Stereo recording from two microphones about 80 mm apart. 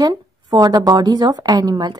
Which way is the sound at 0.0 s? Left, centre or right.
Right.